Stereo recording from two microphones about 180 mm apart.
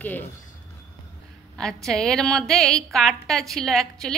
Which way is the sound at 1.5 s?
5° left (ahead or behind).